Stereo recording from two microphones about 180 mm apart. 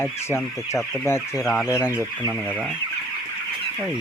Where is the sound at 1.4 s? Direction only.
Centre (ahead or behind).